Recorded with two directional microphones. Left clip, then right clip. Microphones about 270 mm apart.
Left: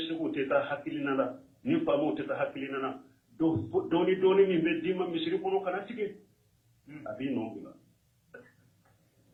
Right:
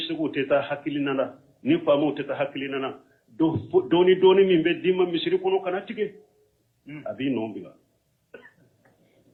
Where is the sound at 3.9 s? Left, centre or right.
Right.